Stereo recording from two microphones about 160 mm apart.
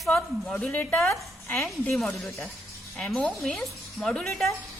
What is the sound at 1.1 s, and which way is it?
Speech, 15° left (ahead or behind).